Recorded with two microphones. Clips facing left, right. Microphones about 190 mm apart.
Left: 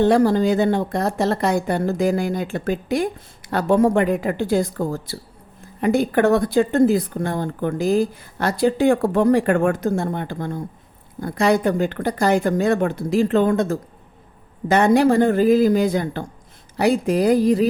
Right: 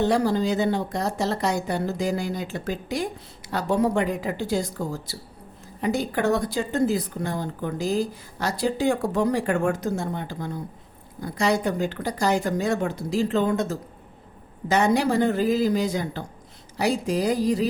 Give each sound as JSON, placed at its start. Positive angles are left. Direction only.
{"t": 0.0, "sound": "speech", "side_deg": 55}